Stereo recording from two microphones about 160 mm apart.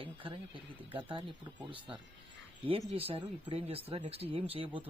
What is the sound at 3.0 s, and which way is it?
Speech, 35° right (ahead or behind).